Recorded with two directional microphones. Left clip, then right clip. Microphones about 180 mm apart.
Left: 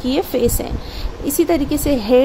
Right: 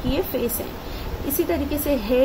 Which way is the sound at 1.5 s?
55° left (ahead or behind).